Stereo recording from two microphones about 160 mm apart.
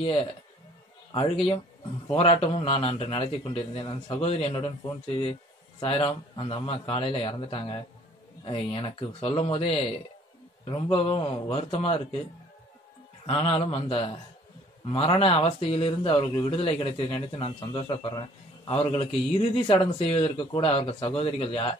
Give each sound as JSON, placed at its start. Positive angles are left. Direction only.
{"t": 0.0, "sound": "speech", "side_deg": 35}
{"t": 5.8, "sound": "speech", "side_deg": 35}
{"t": 13.3, "sound": "speech", "side_deg": 40}